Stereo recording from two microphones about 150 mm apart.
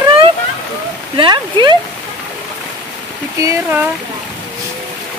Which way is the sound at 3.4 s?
15° right (ahead or behind).